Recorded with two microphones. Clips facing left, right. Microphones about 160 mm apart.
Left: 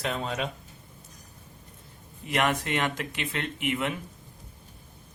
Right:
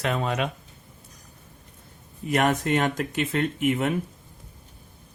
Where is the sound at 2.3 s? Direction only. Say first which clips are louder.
Right 4 dB; 45° right (ahead or behind).